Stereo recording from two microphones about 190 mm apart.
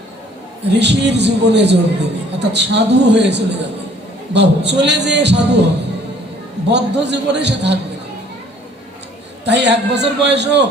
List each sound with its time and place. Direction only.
0.8 s a man's voice: 65° right (ahead or behind)
6.7 s a man's voice: 65° right (ahead or behind)
9.4 s a man's voice: 65° right (ahead or behind)